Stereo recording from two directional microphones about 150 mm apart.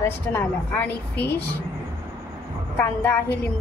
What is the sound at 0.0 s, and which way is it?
A woman's voice, 15° left (ahead or behind).